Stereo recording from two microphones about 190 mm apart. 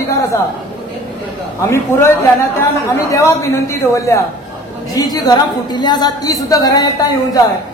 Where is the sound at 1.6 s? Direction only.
15° left (ahead or behind).